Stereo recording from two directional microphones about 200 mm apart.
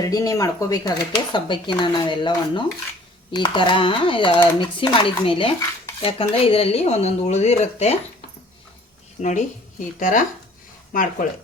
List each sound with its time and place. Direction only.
0.1 s speech: 15° left (ahead or behind); by 7.9 s 35° left (ahead or behind)
10.0 s speech: 40° left (ahead or behind)